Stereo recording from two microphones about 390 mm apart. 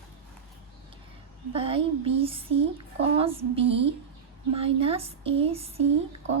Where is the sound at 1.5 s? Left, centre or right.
Centre.